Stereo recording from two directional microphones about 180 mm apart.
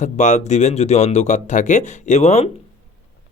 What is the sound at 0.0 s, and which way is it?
A man's voice, 40° left (ahead or behind).